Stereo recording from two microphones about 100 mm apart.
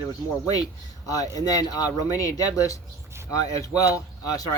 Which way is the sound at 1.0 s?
35° left (ahead or behind).